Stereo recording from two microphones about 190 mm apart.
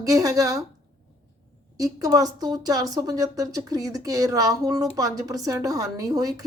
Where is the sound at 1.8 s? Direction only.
20° right (ahead or behind).